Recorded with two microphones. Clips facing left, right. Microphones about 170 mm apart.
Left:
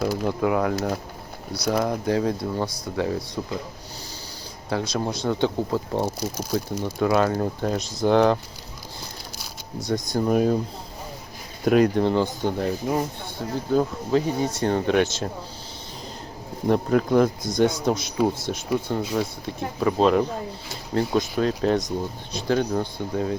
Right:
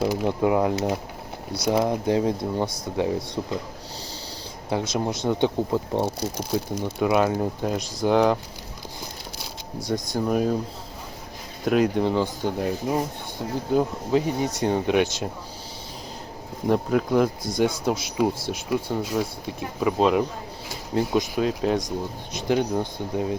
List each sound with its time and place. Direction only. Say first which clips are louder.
0.0 s speech: right 1 dB; 20° right (ahead or behind)
4.7 s speech: right 1 dB; 20° right (ahead or behind)
7.0 s speech: even; 15° right (ahead or behind)
9.8 s speech: left 1 dB; 10° right (ahead or behind)
10.2 s speech: left 3 dB; centre (ahead or behind)
11.6 s speech: left 2 dB; centre (ahead or behind)
16.6 s speech: left 1 dB; 5° right (ahead or behind)